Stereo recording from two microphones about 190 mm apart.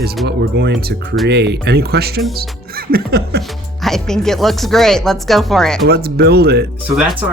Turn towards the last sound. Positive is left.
turn(degrees=-10)  # may be behind; listen again after turning